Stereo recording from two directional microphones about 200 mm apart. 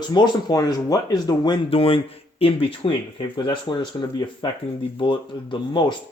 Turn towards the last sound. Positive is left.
turn(degrees=25)  # may be behind; listen again after turning